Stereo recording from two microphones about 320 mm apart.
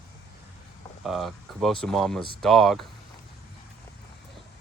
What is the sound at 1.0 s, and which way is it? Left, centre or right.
Speech, centre.